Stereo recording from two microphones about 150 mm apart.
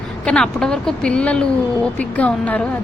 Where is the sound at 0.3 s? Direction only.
5° left (ahead or behind).